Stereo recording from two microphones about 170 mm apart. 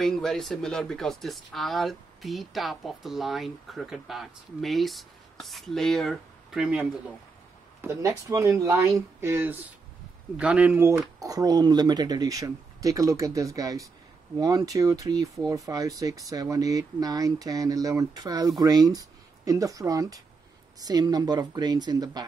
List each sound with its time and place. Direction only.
0.0 s speech: centre (ahead or behind)
7.8 s speech: 20° right (ahead or behind)